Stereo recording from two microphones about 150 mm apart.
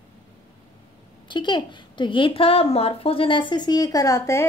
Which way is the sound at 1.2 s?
30° left (ahead or behind).